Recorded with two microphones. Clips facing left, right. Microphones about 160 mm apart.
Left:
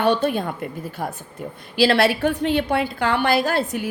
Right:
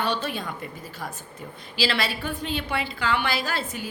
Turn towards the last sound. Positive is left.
turn(degrees=60)  # may be behind; listen again after turning